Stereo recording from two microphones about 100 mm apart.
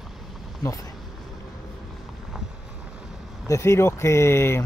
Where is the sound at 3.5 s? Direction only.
30° left (ahead or behind).